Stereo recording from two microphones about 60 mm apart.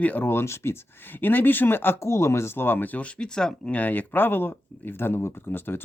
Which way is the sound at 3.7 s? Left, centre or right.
Left.